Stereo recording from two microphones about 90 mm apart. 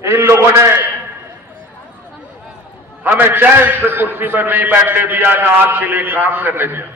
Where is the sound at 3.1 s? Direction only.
20° right (ahead or behind).